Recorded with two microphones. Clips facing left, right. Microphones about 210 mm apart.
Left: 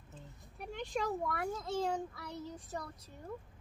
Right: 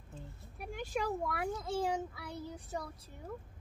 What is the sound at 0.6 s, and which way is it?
A child's voice, 5° right (ahead or behind).